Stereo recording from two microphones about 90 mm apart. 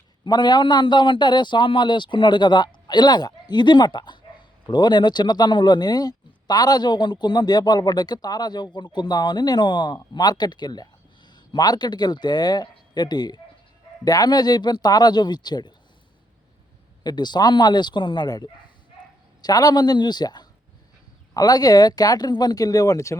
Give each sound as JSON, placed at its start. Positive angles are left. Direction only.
{"t": 0.3, "sound": "a man's voice", "side_deg": 50}
{"t": 17.0, "sound": "a man's voice", "side_deg": 50}